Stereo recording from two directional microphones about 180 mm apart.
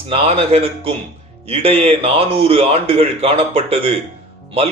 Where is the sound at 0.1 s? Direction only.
35° right (ahead or behind).